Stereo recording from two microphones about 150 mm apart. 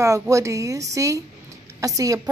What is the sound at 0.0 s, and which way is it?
A woman's voice, 20° right (ahead or behind).